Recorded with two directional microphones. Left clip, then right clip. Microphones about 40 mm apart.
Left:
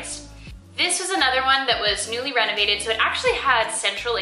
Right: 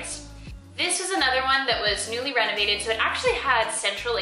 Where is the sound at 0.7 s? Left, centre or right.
Centre.